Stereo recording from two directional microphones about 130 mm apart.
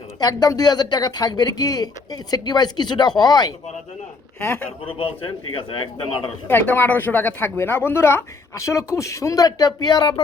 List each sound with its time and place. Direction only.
0.2 s speech: 30° left (ahead or behind)
4.4 s speech: 10° left (ahead or behind)
4.9 s a man's voice: 45° left (ahead or behind)
6.5 s speech: 15° left (ahead or behind); by 10.2 s 35° left (ahead or behind)